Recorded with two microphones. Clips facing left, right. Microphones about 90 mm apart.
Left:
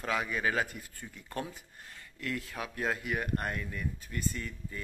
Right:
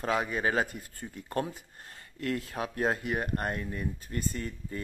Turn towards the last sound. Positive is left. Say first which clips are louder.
# right 2 dB
turn(degrees=-40)  # may be behind; listen again after turning